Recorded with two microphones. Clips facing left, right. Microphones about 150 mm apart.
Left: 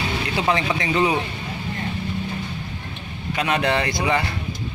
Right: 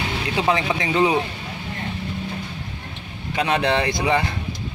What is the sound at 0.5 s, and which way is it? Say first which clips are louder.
Speech: even; 15° right (ahead or behind).